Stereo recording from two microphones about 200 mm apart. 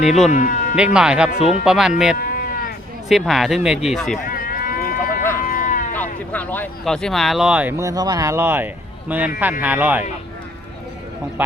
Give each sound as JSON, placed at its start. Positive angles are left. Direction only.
{"t": 0.0, "sound": "speech", "side_deg": 0}
{"t": 0.3, "sound": "speech", "side_deg": 40}
{"t": 0.9, "sound": "speech", "side_deg": -5}
{"t": 2.1, "sound": "livestock", "side_deg": 45}
{"t": 3.1, "sound": "speech", "side_deg": 0}
{"t": 4.3, "sound": "sheep", "side_deg": 45}
{"t": 5.5, "sound": "a sound", "side_deg": 45}
{"t": 6.0, "sound": "speech", "side_deg": 10}
{"t": 11.4, "sound": "speech", "side_deg": -10}